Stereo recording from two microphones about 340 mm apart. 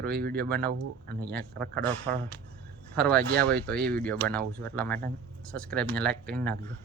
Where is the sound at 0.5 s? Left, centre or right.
Right.